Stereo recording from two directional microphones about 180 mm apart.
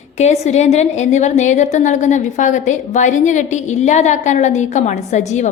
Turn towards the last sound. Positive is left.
turn(degrees=40)  # may be behind; listen again after turning